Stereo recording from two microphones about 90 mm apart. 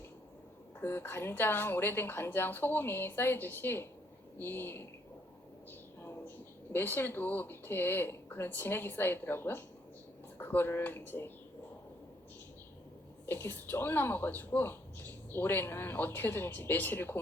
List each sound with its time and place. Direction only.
0.8 s a woman's voice: 25° left (ahead or behind)
6.0 s a sound: 25° left (ahead or behind)
6.7 s a woman's voice: 25° left (ahead or behind)
13.2 s a woman's voice: 25° left (ahead or behind)